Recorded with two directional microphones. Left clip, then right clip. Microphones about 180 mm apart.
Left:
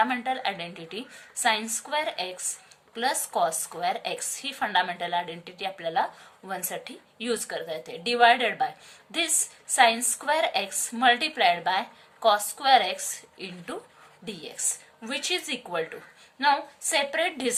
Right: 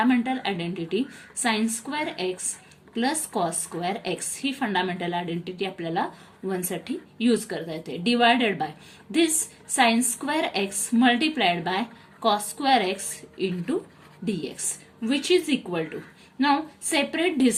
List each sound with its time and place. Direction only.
0.0 s a woman's voice: 20° left (ahead or behind)